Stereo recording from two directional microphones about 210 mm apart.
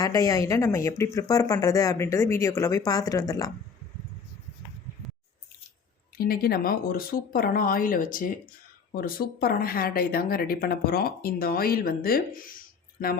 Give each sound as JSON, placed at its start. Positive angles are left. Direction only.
{"t": 0.0, "sound": "speech", "side_deg": 15}
{"t": 6.1, "sound": "a woman's voice", "side_deg": 45}